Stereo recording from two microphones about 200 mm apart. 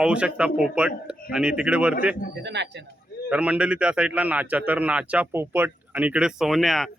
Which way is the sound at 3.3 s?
5° right (ahead or behind).